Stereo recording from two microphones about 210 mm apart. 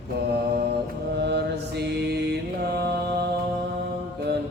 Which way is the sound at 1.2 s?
55° right (ahead or behind).